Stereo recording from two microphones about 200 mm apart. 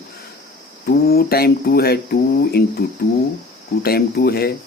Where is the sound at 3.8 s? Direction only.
50° left (ahead or behind).